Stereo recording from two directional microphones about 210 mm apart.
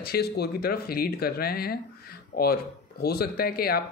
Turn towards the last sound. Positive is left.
turn(degrees=45)  # may be behind; listen again after turning